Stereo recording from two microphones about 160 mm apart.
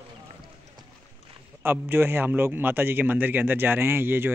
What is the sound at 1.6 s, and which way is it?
A man's voice, 15° right (ahead or behind).